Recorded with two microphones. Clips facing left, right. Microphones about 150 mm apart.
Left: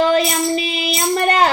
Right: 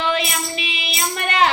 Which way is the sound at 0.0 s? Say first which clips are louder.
Left 7 dB; 40° left (ahead or behind).